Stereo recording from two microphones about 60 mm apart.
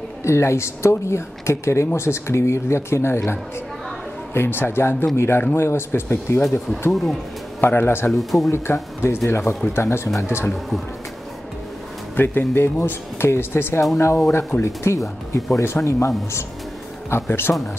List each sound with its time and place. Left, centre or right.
0.2 s speech: left
4.3 s speech: left
6.9 s speech: centre
7.6 s speech: left
8.1 s speech: centre
8.7 s speech: left
12.2 s speech: left
13.9 s speech: left
17.1 s speech: left